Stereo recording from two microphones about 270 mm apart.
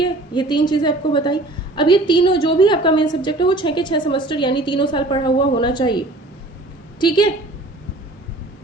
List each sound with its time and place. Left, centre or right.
0.0 s a woman's voice: centre
7.0 s a woman's voice: centre